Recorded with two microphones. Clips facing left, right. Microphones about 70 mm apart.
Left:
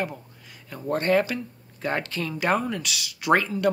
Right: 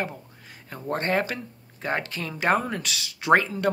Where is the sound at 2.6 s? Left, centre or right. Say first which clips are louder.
Left 1 dB; right.